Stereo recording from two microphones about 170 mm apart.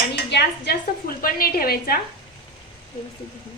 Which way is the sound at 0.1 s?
85° left.